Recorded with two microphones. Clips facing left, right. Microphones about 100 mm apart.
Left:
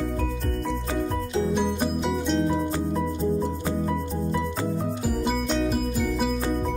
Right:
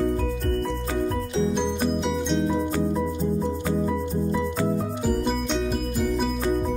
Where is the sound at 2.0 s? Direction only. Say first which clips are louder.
Even; centre (ahead or behind).